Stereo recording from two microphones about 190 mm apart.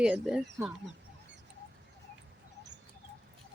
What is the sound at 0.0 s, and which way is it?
Speech, 5° right (ahead or behind).